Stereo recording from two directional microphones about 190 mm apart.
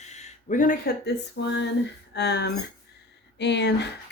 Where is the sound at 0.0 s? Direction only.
35° left (ahead or behind).